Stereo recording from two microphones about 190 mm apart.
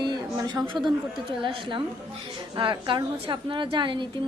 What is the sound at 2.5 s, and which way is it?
A woman's voice, 25° right (ahead or behind).